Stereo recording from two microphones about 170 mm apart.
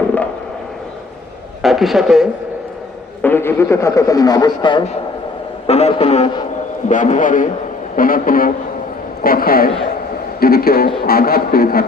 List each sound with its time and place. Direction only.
1.6 s speech: centre (ahead or behind)
3.2 s speech: 10° left (ahead or behind); by 4.9 s 25° left (ahead or behind)
5.6 s a man's voice: 40° left (ahead or behind); by 11.9 s 60° left (ahead or behind)